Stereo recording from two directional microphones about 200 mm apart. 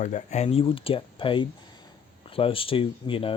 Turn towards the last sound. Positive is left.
turn(degrees=25)  # may be behind; listen again after turning